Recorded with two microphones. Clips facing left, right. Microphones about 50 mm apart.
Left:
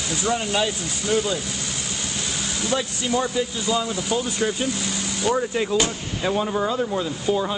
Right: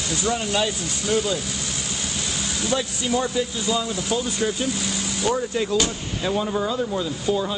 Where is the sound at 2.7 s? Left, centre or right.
Centre.